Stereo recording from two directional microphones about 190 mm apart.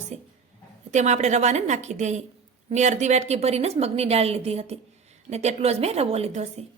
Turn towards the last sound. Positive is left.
turn(degrees=-35)  # may be behind; listen again after turning